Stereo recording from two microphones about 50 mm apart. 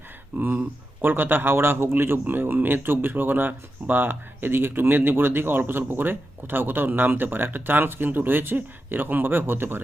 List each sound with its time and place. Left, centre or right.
0.3 s speech: right